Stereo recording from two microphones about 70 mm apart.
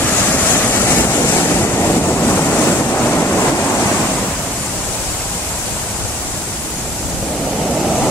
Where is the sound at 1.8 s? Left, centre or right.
Left.